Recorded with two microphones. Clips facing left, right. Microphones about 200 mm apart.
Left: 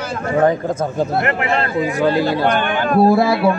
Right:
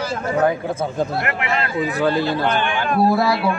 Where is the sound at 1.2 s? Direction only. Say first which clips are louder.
Left 4 dB; 30° left (ahead or behind).